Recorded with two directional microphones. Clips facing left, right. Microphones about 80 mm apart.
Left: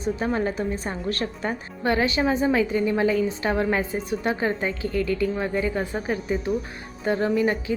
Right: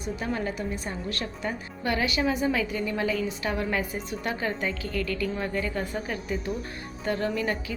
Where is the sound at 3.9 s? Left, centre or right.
Left.